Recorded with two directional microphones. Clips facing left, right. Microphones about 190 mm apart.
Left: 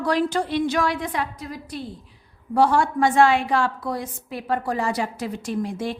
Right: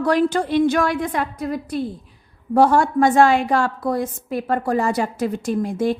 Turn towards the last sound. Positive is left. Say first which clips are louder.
# right 6 dB
turn(degrees=-45)  # may be behind; listen again after turning